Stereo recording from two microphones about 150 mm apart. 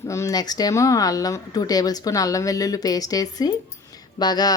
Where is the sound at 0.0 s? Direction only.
20° left (ahead or behind).